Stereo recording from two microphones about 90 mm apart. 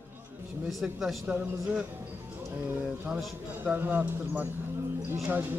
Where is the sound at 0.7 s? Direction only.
Centre (ahead or behind).